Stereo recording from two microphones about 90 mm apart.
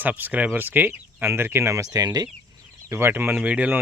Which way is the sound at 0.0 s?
20° right (ahead or behind).